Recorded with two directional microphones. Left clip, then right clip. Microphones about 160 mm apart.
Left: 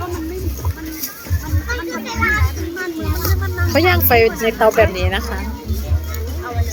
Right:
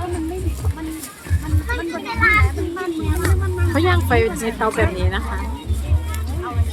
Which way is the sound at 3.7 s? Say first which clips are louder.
Left 5 dB; 15° left (ahead or behind).